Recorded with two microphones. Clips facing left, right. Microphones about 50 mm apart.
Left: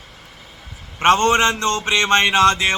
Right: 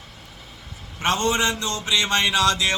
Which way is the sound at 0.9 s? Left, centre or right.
Left.